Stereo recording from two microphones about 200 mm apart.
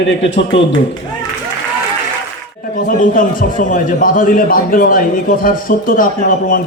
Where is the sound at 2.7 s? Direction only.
40° left (ahead or behind).